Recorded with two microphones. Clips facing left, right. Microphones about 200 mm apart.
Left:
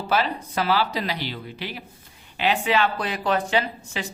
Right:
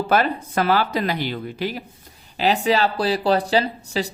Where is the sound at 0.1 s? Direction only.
50° right (ahead or behind).